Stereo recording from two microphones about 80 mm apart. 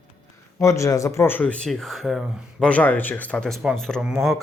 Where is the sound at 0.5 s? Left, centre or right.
Left.